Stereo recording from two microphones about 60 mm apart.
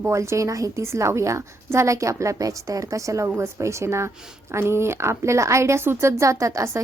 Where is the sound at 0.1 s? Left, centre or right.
Right.